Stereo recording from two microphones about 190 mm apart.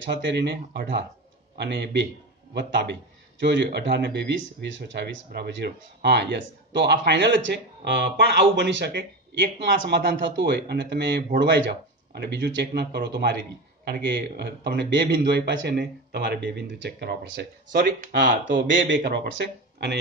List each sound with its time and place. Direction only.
0.0 s speech: 70° right (ahead or behind)
17.7 s speech: 45° right (ahead or behind)
18.1 s speech: 70° right (ahead or behind)